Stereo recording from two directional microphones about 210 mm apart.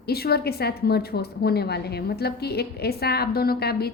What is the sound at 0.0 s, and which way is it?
A woman's voice, 50° left (ahead or behind).